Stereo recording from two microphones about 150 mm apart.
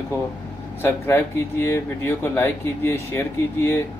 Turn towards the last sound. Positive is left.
turn(degrees=15)  # may be behind; listen again after turning